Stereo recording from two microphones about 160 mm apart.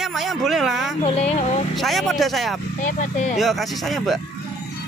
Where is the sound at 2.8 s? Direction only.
50° left (ahead or behind).